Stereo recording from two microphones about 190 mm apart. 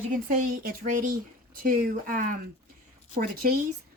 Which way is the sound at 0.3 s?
50° right (ahead or behind).